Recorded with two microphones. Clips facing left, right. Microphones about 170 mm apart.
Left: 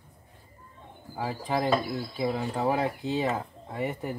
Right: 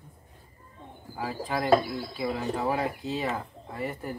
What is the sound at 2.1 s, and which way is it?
Speech, 20° left (ahead or behind).